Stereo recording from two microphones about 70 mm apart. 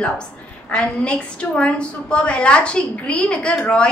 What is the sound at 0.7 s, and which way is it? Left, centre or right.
A woman's voice, centre.